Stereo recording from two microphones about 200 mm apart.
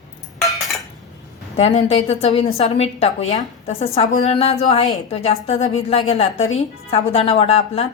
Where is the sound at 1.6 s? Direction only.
30° left (ahead or behind).